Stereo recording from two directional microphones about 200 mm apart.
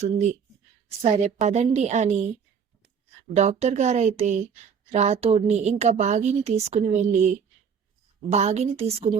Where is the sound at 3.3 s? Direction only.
35° right (ahead or behind).